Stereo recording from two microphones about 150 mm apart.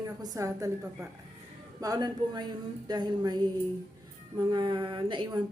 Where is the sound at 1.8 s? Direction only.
25° right (ahead or behind).